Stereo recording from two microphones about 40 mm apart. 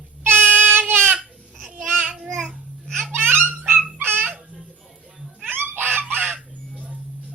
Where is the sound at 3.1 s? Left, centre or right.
Right.